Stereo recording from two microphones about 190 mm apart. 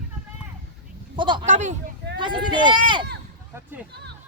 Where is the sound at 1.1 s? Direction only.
25° right (ahead or behind).